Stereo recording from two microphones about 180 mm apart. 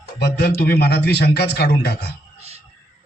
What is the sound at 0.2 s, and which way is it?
A man's voice, 65° left (ahead or behind).